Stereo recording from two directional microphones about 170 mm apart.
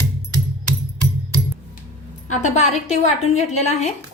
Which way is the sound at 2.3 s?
45° left (ahead or behind).